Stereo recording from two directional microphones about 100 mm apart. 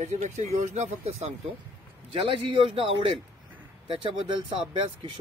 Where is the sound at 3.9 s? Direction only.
55° right (ahead or behind).